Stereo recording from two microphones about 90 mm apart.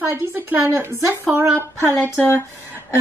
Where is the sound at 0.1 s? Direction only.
20° right (ahead or behind).